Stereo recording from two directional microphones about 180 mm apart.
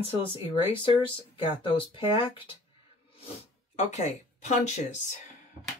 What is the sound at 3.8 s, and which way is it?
Speech, 40° left (ahead or behind).